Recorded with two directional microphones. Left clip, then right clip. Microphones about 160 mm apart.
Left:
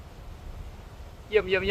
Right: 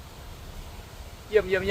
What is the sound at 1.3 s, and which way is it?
Speech, 15° left (ahead or behind).